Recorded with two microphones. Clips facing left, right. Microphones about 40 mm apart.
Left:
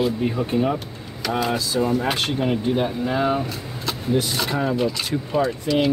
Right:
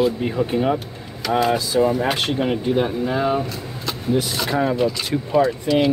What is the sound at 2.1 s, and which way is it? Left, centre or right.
Speech, centre.